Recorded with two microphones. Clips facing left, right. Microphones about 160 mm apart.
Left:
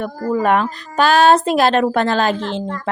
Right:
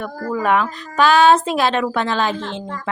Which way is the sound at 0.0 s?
40° left (ahead or behind).